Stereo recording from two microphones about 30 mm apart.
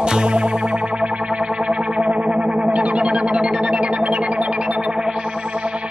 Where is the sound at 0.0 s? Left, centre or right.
Right.